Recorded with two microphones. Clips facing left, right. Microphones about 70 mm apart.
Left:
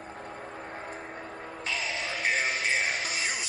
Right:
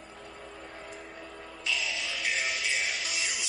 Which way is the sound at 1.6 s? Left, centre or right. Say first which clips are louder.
Left 1 dB; left.